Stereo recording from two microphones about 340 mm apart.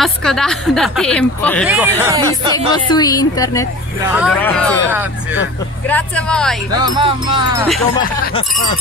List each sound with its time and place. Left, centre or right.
0.0 s speech: centre
2.9 s speech: centre
4.0 s speech: centre
6.7 s speech: centre
8.0 s speech: centre